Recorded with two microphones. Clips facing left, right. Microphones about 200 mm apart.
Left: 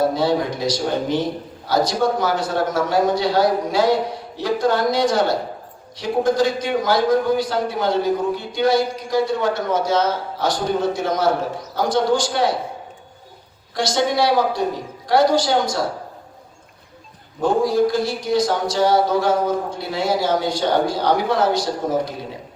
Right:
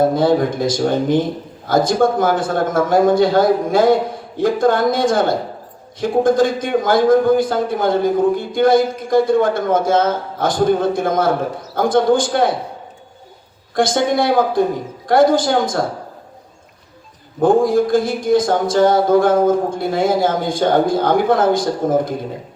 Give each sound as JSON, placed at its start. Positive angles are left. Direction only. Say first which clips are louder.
{"t": 0.0, "sound": "a man's voice", "louder": "right 4 dB", "side_deg": -50}
{"t": 13.7, "sound": "a man's voice", "louder": "right 4 dB", "side_deg": -50}
{"t": 17.4, "sound": "a man's voice", "louder": "right 4 dB", "side_deg": -50}